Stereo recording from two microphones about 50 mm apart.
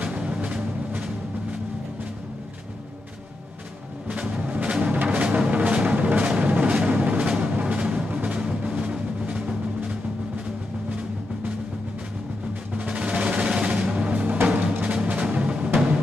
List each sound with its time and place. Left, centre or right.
0.0 s music: right
4.1 s music: right
12.7 s music: right
14.2 s music: right